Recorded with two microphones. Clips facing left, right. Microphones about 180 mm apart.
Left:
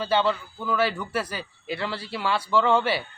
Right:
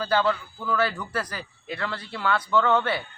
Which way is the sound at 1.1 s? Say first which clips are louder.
Left 2 dB; 25° left (ahead or behind).